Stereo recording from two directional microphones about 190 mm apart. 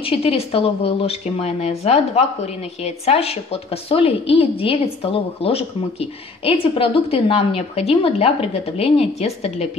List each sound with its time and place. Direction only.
0.0 s speech: 30° left (ahead or behind)